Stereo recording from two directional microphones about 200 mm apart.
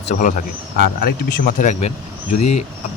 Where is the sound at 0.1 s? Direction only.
40° left (ahead or behind).